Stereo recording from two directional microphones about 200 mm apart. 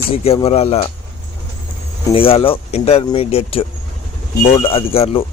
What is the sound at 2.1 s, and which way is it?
Speech, 25° left (ahead or behind).